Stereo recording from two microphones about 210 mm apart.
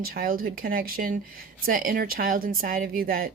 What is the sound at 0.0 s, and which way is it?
A woman's voice, 45° right (ahead or behind).